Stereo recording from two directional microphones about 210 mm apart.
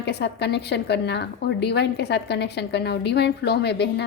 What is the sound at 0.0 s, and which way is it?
A woman's voice, 55° left (ahead or behind).